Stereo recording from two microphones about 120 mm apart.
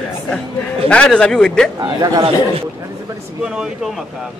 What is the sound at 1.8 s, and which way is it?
Speech, 35° right (ahead or behind).